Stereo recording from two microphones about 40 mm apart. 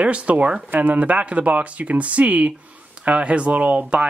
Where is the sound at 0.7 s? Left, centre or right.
Right.